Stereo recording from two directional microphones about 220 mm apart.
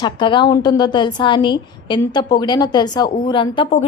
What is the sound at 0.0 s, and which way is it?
A woman's voice, 20° left (ahead or behind).